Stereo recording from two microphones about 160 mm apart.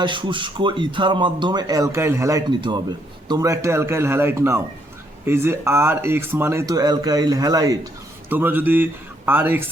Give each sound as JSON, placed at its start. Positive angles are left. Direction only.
{"t": 0.0, "sound": "speech", "side_deg": -30}
{"t": 8.3, "sound": "speech", "side_deg": -10}